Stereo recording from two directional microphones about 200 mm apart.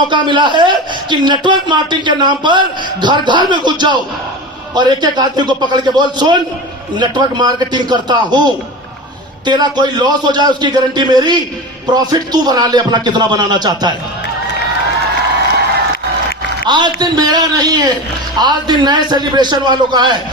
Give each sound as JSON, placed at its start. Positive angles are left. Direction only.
{"t": 0.1, "sound": "a man's voice", "side_deg": -25}
{"t": 9.5, "sound": "a man's voice", "side_deg": -20}
{"t": 16.6, "sound": "a man's voice", "side_deg": -20}